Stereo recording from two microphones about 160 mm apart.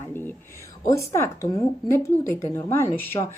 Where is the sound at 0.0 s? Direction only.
15° left (ahead or behind).